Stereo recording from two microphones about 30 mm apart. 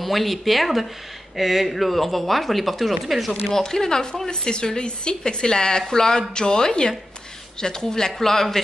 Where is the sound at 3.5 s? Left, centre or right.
Centre.